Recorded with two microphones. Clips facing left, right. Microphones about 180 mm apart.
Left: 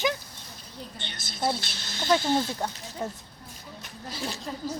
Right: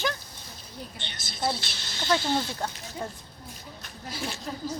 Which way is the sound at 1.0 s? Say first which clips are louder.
Left 1 dB; 50° left (ahead or behind).